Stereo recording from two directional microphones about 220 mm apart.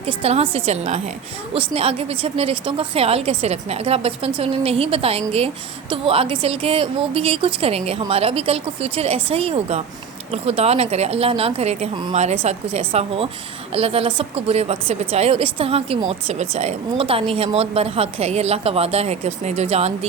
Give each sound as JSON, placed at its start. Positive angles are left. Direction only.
{"t": 0.0, "sound": "speech", "side_deg": -25}